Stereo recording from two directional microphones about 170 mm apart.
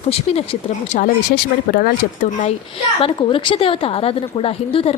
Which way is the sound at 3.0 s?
30° left (ahead or behind).